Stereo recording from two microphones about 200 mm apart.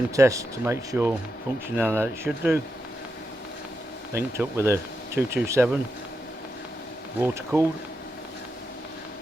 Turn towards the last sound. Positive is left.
turn(degrees=-15)  # may be behind; listen again after turning